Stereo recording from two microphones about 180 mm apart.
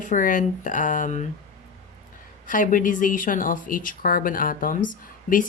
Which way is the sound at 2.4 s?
45° left (ahead or behind).